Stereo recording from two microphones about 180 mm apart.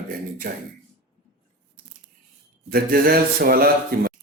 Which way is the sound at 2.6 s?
55° right (ahead or behind).